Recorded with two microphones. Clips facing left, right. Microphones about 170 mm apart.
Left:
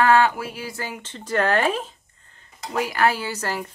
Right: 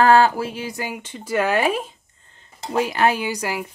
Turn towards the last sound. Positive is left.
turn(degrees=-10)  # may be behind; listen again after turning